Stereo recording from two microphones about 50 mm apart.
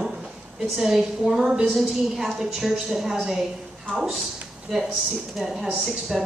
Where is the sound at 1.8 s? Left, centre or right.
Centre.